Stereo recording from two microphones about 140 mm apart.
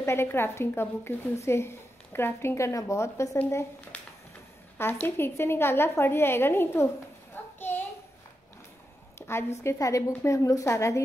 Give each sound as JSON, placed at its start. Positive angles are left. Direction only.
{"t": 0.0, "sound": "a woman's voice", "side_deg": 20}
{"t": 5.0, "sound": "a woman's voice", "side_deg": 15}
{"t": 7.4, "sound": "a sound", "side_deg": 10}
{"t": 9.2, "sound": "speech", "side_deg": 15}